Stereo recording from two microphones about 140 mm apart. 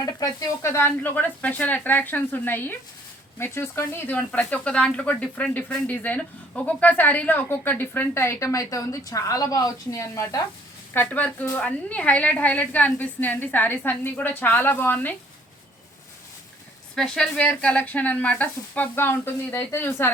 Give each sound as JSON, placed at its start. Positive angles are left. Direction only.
{"t": 0.0, "sound": "speech", "side_deg": 25}
{"t": 16.9, "sound": "speech", "side_deg": 5}